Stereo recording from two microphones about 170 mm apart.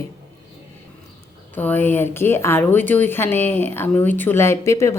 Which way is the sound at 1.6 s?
10° left (ahead or behind).